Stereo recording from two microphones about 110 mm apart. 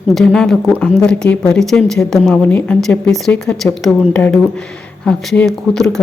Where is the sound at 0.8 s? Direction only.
5° left (ahead or behind).